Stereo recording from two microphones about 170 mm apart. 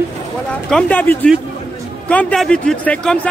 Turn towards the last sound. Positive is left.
turn(degrees=5)  # may be behind; listen again after turning